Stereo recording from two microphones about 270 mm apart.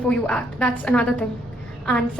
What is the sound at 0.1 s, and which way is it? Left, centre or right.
A woman's voice, centre.